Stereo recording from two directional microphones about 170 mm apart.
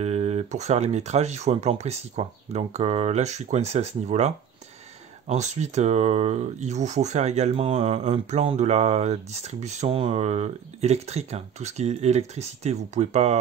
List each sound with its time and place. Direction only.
0.0 s speech: 40° right (ahead or behind)